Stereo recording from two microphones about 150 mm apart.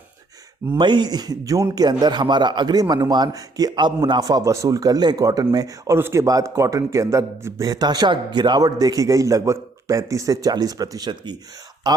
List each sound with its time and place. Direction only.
0.8 s a man's voice: 30° right (ahead or behind)